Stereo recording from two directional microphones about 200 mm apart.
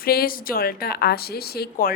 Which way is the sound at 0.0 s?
50° left (ahead or behind).